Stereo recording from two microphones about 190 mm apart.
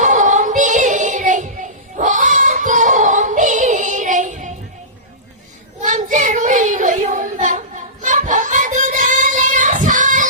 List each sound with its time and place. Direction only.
0.0 s music: 40° right (ahead or behind)
5.8 s child singing: 40° right (ahead or behind)